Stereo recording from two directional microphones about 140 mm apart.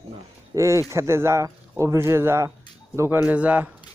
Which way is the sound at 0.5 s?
20° right (ahead or behind).